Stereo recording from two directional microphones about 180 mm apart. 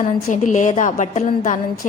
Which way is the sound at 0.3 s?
40° left (ahead or behind).